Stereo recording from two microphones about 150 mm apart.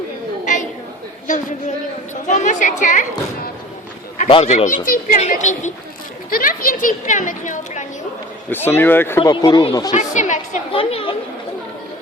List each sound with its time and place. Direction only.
1.3 s a woman's voice: 55° left (ahead or behind)
6.3 s speech: 70° left (ahead or behind); by 7.9 s 55° left (ahead or behind)
8.4 s speech: 15° left (ahead or behind)
9.3 s speech: 30° left (ahead or behind)
9.9 s a woman's voice: 55° left (ahead or behind)
10.7 s speech: 40° left (ahead or behind)